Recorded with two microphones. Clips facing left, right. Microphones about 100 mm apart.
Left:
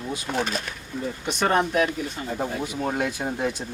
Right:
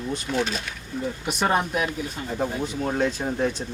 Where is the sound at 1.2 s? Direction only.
5° right (ahead or behind).